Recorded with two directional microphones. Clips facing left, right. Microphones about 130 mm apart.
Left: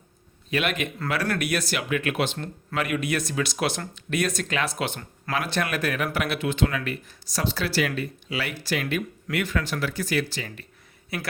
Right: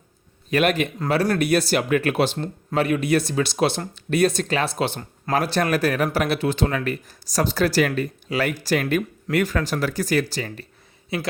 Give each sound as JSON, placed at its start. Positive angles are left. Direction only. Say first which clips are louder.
{"t": 0.5, "sound": "speech", "louder": "right 6 dB", "side_deg": -40}
{"t": 11.1, "sound": "speech", "louder": "right 5 dB", "side_deg": -25}